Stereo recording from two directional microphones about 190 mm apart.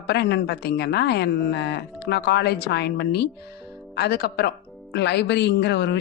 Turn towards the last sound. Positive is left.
turn(degrees=65)  # may be behind; listen again after turning